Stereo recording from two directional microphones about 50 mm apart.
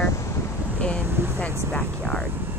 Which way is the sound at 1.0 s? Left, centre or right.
Right.